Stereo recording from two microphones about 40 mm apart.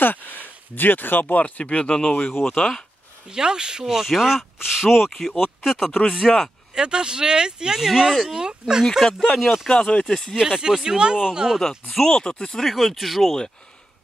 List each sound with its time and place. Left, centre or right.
0.0 s speech: left
1.2 s speech: left
3.3 s speech: centre
5.4 s speech: centre
5.9 s speech: left
6.7 s speech: centre
9.0 s speech: centre
9.7 s speech: left
10.0 s speech: centre
10.6 s speech: centre
11.9 s speech: centre
12.6 s speech: centre